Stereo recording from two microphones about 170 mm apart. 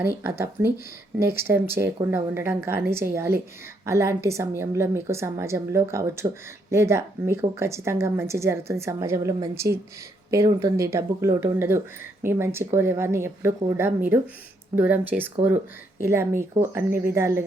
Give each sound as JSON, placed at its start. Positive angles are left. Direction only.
{"t": 0.0, "sound": "speech", "side_deg": -15}